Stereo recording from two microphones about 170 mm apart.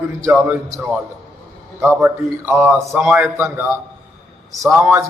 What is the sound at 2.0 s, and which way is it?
A man's voice, 10° right (ahead or behind).